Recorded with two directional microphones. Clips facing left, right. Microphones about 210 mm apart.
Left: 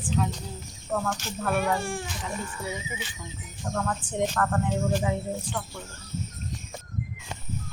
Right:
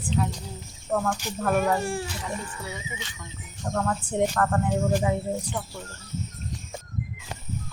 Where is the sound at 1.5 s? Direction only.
40° right (ahead or behind).